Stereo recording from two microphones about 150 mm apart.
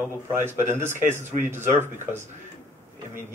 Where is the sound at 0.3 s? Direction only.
15° right (ahead or behind).